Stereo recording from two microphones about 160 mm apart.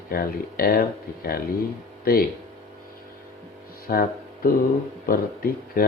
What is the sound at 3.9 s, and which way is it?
Speech, 60° left (ahead or behind).